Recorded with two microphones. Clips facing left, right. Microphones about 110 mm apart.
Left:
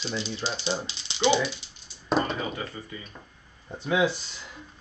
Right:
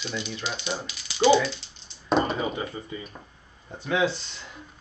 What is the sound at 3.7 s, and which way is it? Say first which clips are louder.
Speech: even; 15° left (ahead or behind).